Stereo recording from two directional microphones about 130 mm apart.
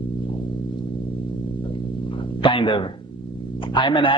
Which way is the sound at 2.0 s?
40° left (ahead or behind).